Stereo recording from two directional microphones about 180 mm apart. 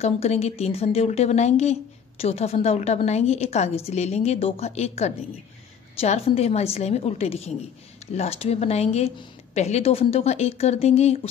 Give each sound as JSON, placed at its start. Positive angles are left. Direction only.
{"t": 0.0, "sound": "speech", "side_deg": 35}